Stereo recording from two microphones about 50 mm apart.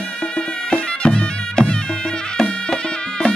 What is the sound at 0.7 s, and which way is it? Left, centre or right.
Bagpipes, centre.